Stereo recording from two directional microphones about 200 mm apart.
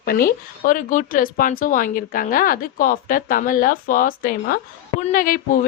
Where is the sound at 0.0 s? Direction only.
45° left (ahead or behind).